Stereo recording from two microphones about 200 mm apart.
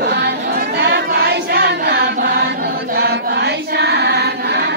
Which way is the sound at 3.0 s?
55° right (ahead or behind).